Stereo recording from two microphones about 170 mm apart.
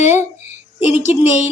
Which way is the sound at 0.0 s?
45° left (ahead or behind).